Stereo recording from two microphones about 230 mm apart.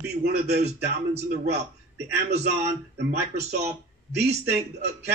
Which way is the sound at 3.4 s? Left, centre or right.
Right.